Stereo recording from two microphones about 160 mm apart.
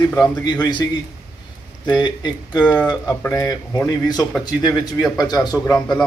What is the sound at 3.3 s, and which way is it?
Speech, 20° left (ahead or behind).